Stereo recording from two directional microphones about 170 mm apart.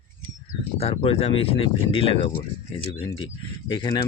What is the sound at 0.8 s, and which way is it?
Speech, 35° left (ahead or behind).